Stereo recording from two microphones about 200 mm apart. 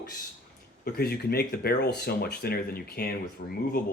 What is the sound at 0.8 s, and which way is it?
Speech, 50° left (ahead or behind).